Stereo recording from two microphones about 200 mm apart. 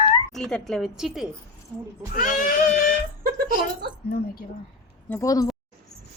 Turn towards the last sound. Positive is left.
turn(degrees=15)  # may be behind; listen again after turning